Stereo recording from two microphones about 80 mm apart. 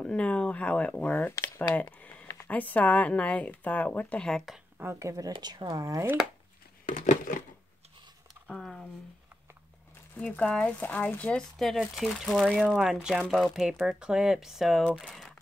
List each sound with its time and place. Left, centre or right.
0.0 s speech: centre
1.8 s a sound: centre
2.2 s speech: left
4.3 s speech: centre
4.9 s speech: right
5.3 s speech: right
8.5 s a sound: centre
10.1 s speech: centre
11.5 s speech: centre